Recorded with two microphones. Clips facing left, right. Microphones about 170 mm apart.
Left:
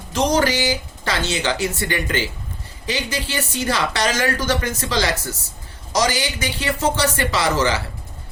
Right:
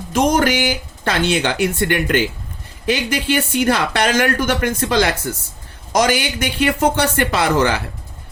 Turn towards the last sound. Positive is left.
turn(degrees=-60)  # may be behind; listen again after turning